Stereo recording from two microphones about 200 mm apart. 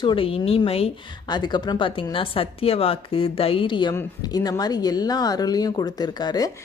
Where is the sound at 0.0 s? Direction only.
25° left (ahead or behind).